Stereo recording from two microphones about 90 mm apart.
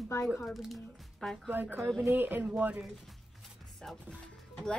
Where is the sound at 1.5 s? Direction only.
20° right (ahead or behind).